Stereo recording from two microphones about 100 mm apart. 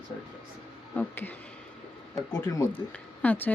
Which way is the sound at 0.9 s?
20° left (ahead or behind).